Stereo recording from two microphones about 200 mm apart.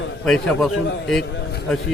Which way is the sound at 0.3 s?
5° left (ahead or behind).